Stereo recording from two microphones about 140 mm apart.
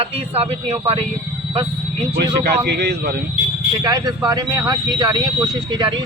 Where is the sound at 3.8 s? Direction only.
30° right (ahead or behind).